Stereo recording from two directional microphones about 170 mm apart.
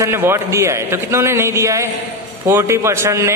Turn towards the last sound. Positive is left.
turn(degrees=-15)  # may be behind; listen again after turning